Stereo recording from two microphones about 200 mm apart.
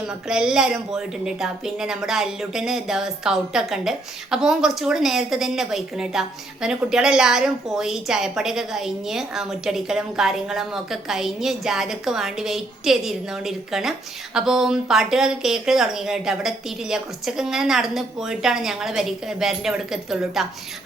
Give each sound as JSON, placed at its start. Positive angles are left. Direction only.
{"t": 0.1, "sound": "a woman's voice", "side_deg": -5}